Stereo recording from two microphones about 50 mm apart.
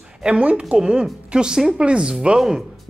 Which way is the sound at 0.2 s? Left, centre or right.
Right.